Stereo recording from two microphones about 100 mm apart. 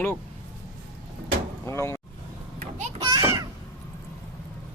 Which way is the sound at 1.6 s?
30° left (ahead or behind).